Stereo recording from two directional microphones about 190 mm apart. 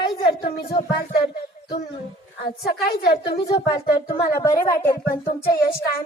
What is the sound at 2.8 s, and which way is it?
Speech, 55° left (ahead or behind).